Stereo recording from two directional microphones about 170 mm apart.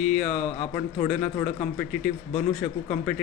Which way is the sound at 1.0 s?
10° left (ahead or behind).